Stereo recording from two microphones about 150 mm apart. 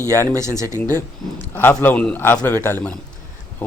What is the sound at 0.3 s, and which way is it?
Speech, 20° right (ahead or behind).